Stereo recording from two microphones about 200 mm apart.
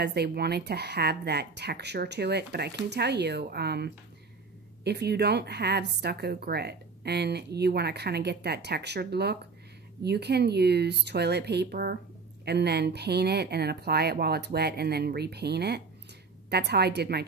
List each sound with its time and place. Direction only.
0.0 s speech: 55° right (ahead or behind)